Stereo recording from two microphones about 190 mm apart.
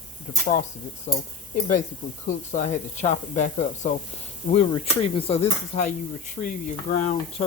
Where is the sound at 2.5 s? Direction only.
40° left (ahead or behind).